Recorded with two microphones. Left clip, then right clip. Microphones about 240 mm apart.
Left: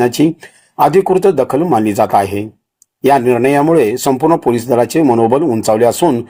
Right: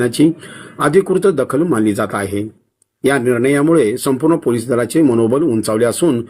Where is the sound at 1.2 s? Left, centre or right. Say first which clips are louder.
Left 3 dB; left.